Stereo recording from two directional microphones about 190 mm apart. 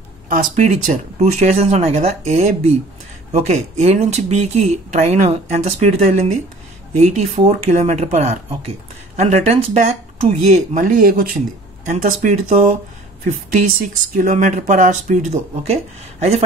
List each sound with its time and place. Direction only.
0.3 s speech: 40° right (ahead or behind)